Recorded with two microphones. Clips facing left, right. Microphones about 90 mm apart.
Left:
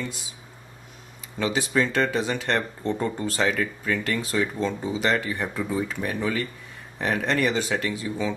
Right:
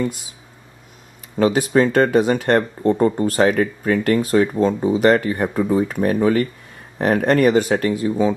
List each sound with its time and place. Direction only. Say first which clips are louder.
1.4 s speech: right 8 dB; 50° right (ahead or behind)